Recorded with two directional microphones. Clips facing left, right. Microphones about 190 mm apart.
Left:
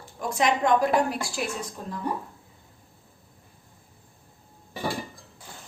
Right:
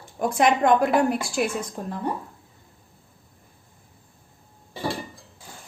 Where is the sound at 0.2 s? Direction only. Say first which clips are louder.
Right 4 dB; 55° right (ahead or behind).